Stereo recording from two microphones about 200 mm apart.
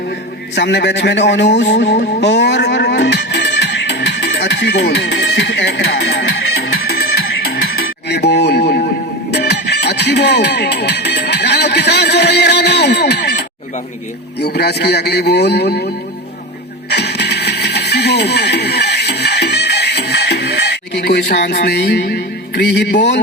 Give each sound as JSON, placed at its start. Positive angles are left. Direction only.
{"t": 0.5, "sound": "a man's voice", "side_deg": 55}
{"t": 1.7, "sound": "music", "side_deg": 55}
{"t": 14.4, "sound": "a man's voice", "side_deg": 55}
{"t": 16.9, "sound": "music", "side_deg": 55}